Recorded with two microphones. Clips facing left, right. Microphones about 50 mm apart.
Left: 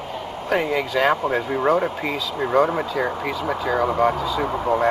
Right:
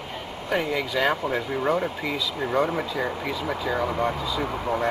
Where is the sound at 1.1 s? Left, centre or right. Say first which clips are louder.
Left 4 dB; centre.